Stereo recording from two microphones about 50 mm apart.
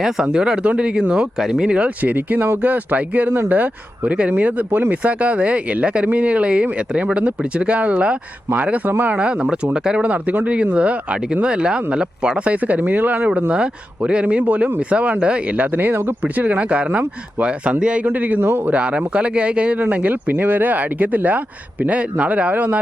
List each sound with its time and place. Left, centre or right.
0.0 s speech: centre
1.4 s speech: centre
2.0 s speech: right
5.0 s speech: right
12.5 s speech: right
13.5 s speech: right
15.5 s speech: right
18.0 s speech: right